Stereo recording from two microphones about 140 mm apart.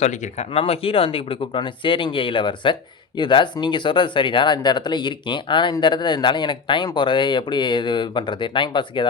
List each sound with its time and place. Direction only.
0.0 s speech: 55° left (ahead or behind); by 9.0 s 35° left (ahead or behind)